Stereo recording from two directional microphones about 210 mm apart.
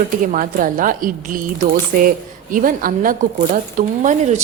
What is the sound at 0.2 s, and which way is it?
A woman's voice, 40° right (ahead or behind).